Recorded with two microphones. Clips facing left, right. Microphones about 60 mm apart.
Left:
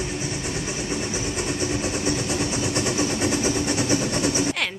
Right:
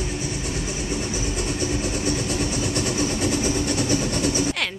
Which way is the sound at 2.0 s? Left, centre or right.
Left.